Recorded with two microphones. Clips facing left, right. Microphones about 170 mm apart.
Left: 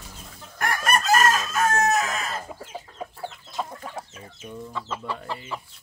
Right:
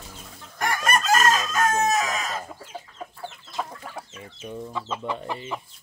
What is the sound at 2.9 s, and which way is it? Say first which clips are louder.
Chicken: left 2 dB; 15° left (ahead or behind).